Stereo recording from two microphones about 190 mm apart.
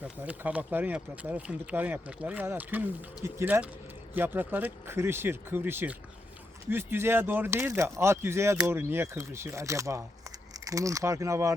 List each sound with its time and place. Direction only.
0.2 s speech: 5° right (ahead or behind)